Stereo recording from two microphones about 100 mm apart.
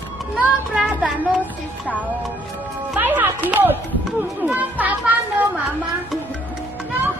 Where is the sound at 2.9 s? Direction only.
15° right (ahead or behind).